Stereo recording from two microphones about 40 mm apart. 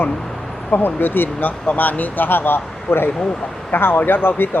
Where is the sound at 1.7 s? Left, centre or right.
Left.